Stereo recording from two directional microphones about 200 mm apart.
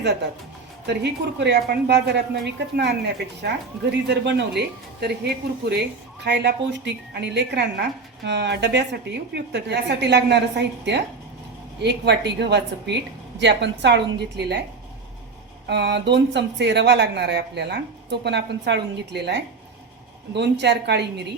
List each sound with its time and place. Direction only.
0.9 s speech: 60° right (ahead or behind)
11.8 s speech: 60° right (ahead or behind)
15.6 s speech: 60° right (ahead or behind)